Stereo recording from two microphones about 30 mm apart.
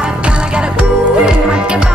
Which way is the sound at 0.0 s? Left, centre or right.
Right.